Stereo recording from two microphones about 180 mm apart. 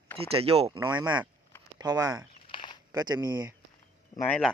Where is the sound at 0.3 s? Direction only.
35° right (ahead or behind).